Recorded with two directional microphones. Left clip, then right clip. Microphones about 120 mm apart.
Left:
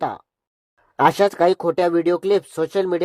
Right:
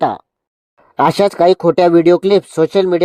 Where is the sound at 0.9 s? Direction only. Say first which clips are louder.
Right 4 dB; 50° right (ahead or behind).